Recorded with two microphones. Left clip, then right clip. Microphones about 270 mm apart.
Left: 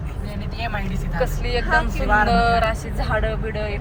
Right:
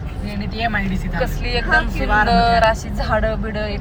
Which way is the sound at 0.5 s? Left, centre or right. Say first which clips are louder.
Right 7 dB; left.